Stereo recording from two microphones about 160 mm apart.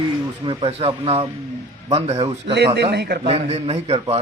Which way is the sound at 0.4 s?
30° right (ahead or behind).